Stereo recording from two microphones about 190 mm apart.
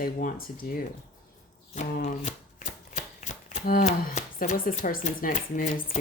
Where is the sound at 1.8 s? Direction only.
40° left (ahead or behind).